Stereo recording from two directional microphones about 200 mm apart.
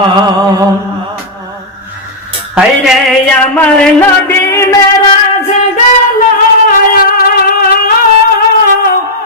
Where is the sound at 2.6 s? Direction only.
Centre (ahead or behind); by 4.7 s 15° left (ahead or behind).